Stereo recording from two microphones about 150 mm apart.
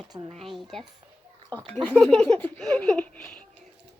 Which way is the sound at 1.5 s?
25° right (ahead or behind).